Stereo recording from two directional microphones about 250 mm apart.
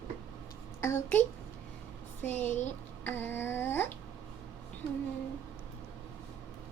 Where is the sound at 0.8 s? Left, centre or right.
Centre.